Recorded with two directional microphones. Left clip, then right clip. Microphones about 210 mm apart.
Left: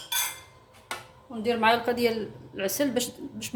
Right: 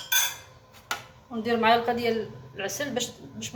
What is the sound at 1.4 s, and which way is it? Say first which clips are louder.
A woman's voice: right 1 dB; 45° left (ahead or behind).